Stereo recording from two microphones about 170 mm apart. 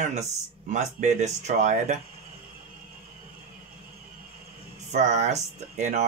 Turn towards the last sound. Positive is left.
turn(degrees=-45)  # may be behind; listen again after turning